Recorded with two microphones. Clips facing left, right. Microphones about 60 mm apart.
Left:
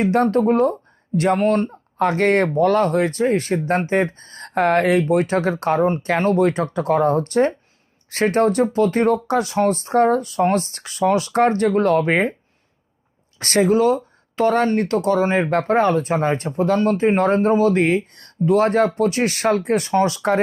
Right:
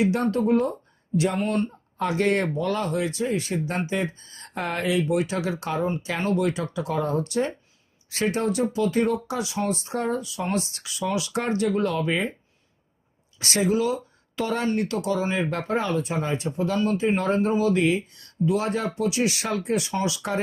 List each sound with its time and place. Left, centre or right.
0.0 s speech: left
13.4 s speech: left